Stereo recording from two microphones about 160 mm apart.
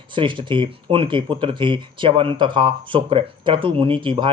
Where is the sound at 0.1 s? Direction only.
30° right (ahead or behind).